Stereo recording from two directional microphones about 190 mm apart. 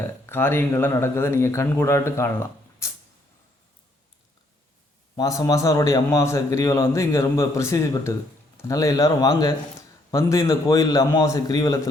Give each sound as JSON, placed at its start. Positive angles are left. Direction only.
{"t": 0.3, "sound": "a man's voice", "side_deg": 10}
{"t": 5.1, "sound": "a man's voice", "side_deg": 20}